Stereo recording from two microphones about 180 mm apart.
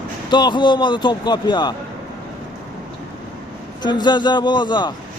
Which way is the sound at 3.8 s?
25° left (ahead or behind).